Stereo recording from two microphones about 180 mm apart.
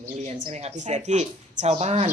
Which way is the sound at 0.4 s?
40° right (ahead or behind).